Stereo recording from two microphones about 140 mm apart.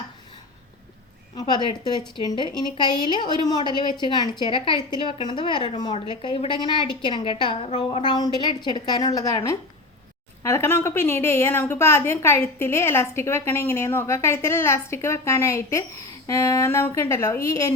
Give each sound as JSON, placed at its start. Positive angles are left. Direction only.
{"t": 1.4, "sound": "a woman's voice", "side_deg": 30}